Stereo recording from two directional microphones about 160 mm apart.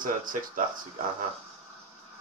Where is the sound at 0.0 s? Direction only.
60° right (ahead or behind).